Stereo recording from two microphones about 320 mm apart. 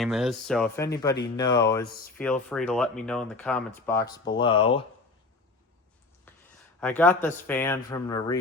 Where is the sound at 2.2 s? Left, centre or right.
Centre.